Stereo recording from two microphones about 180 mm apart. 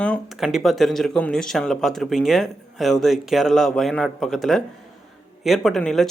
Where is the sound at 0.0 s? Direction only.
Centre (ahead or behind).